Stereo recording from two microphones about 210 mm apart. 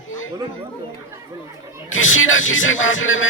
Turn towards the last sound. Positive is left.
turn(degrees=65)  # may be behind; listen again after turning